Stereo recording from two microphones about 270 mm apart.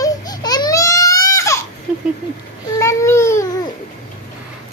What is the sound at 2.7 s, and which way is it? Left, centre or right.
Babbling, centre.